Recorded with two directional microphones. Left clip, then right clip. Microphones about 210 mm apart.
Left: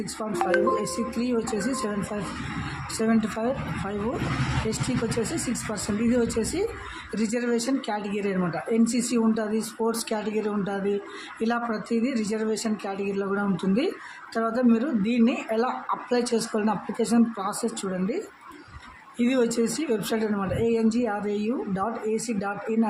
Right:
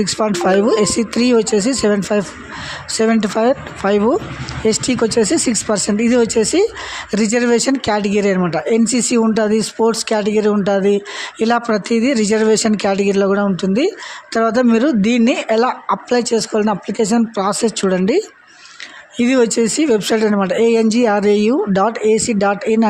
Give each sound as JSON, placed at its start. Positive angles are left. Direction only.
{"t": 0.0, "sound": "speech", "side_deg": -40}
{"t": 3.0, "sound": "speech", "side_deg": -40}